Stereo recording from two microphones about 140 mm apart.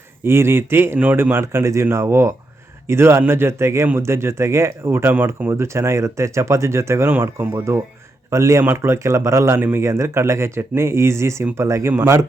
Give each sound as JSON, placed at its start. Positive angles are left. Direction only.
{"t": 0.3, "sound": "a man's voice", "side_deg": -15}